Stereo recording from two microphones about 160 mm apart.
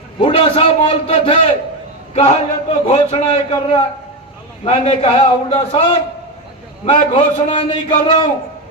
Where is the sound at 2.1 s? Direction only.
45° left (ahead or behind).